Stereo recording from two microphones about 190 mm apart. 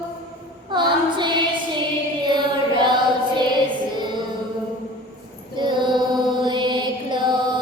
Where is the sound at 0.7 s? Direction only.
25° right (ahead or behind).